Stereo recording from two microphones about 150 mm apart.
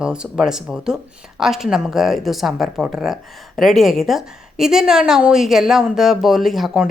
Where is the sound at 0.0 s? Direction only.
5° right (ahead or behind).